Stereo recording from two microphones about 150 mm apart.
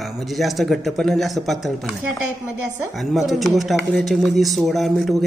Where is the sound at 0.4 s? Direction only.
Centre (ahead or behind).